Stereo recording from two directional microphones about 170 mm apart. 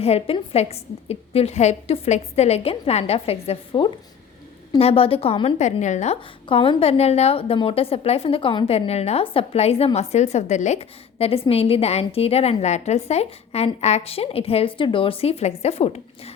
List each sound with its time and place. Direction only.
0.0 s a woman's voice: 35° left (ahead or behind)